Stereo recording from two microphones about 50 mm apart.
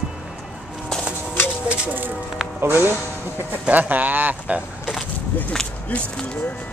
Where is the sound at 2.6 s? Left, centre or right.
Right.